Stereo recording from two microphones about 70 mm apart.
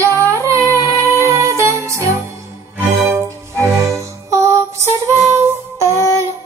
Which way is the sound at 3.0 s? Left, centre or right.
Centre.